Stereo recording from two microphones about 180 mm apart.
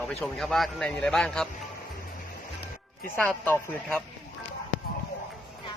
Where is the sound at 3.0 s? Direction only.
10° left (ahead or behind).